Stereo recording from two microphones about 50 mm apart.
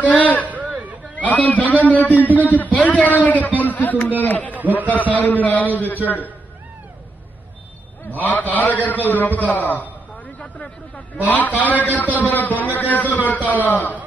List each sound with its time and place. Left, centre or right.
0.2 s speech: left
0.5 s a sound: right
1.1 s a man's voice: left
8.1 s a man's voice: left